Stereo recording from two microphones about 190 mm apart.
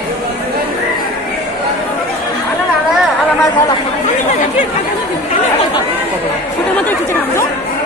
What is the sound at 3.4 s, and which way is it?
Chatter, 25° left (ahead or behind).